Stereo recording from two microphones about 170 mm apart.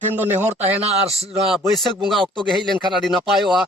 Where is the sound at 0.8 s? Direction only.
35° right (ahead or behind).